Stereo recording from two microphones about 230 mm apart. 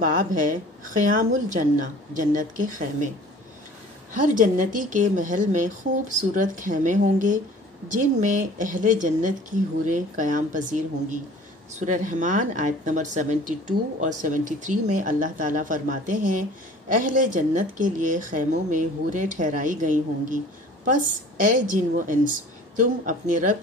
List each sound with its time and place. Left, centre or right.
0.0 s speech: right
4.1 s speech: right